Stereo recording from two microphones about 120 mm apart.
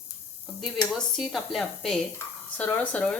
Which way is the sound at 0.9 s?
Centre (ahead or behind).